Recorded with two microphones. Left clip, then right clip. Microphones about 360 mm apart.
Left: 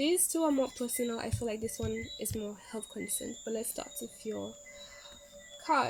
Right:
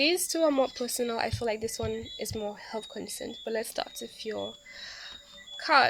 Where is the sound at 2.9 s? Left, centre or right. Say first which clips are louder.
Right 2 dB; right.